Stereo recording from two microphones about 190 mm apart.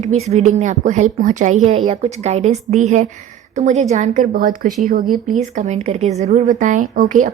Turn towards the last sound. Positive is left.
turn(degrees=-40)  # may be behind; listen again after turning